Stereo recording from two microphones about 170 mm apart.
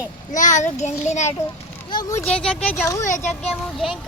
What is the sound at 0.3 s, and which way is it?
Speech, 45° left (ahead or behind).